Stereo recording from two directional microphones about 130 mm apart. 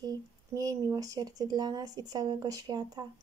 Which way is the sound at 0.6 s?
25° right (ahead or behind).